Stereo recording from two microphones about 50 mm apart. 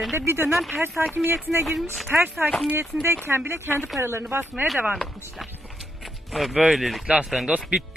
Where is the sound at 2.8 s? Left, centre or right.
Right.